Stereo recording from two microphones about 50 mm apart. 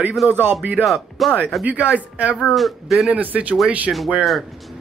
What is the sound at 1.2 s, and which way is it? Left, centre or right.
Speech, centre.